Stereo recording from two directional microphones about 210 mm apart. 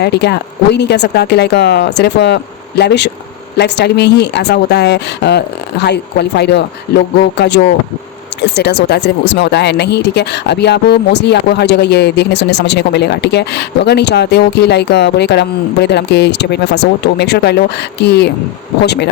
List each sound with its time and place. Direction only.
0.0 s speech: 50° left (ahead or behind)